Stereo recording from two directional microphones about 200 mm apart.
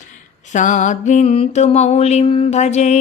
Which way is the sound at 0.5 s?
40° left (ahead or behind).